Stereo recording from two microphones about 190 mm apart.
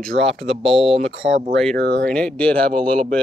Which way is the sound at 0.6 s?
30° right (ahead or behind).